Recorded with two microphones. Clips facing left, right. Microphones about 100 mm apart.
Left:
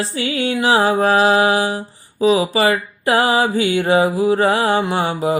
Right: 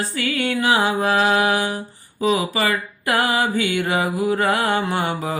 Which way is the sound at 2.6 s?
25° left (ahead or behind).